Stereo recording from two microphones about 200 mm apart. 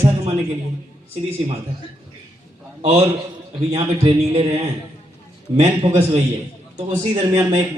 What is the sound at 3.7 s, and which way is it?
Music, 30° right (ahead or behind).